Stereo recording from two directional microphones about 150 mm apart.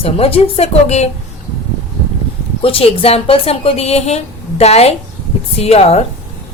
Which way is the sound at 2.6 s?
40° left (ahead or behind).